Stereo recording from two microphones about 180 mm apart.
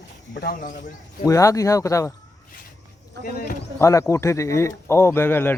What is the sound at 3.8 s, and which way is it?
Speech, 15° left (ahead or behind).